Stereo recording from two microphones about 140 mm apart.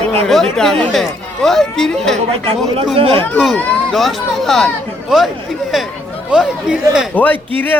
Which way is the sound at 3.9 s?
Centre (ahead or behind).